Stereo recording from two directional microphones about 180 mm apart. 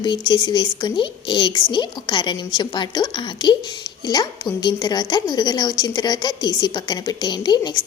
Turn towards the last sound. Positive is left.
turn(degrees=25)  # may be behind; listen again after turning